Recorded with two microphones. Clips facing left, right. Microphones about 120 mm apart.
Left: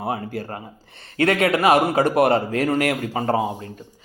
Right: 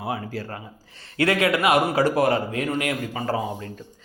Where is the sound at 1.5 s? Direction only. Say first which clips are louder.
Left 3 dB; 30° left (ahead or behind).